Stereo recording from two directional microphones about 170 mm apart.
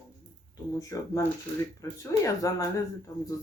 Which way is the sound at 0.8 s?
20° left (ahead or behind).